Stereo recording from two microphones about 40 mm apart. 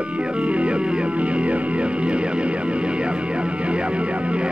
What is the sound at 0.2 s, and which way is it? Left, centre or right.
Music, right.